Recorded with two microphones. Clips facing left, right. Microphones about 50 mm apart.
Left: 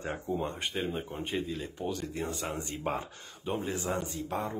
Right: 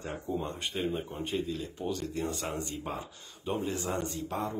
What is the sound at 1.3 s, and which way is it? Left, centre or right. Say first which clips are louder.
A man's voice: right 2 dB; centre.